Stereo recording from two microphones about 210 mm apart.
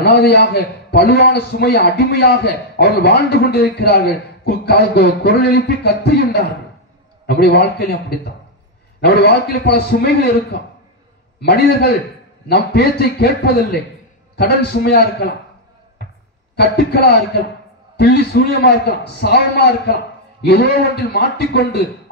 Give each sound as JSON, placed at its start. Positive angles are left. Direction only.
{"t": 0.0, "sound": "a man's voice", "side_deg": 50}
{"t": 16.5, "sound": "a man's voice", "side_deg": 50}